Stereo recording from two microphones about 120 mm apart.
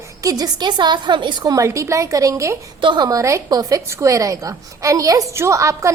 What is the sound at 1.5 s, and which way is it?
A woman's voice, 25° right (ahead or behind).